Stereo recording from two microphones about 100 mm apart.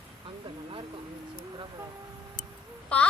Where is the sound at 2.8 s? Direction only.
15° left (ahead or behind).